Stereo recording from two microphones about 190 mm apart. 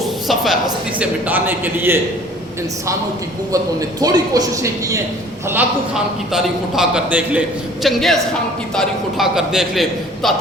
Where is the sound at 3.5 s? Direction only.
20° right (ahead or behind).